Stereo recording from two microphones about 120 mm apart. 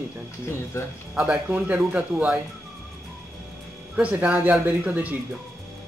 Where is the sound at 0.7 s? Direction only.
20° left (ahead or behind).